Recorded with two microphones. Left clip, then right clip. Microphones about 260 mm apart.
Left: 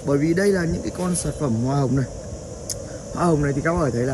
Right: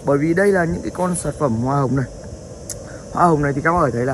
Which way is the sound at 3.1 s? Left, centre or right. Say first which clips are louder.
Right 6 dB; centre.